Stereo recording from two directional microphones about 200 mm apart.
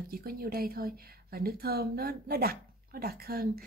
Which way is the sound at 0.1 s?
50° right (ahead or behind).